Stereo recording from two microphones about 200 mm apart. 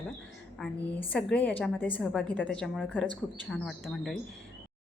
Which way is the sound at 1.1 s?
5° left (ahead or behind).